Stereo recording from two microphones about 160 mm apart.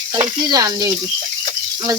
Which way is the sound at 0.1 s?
25° right (ahead or behind).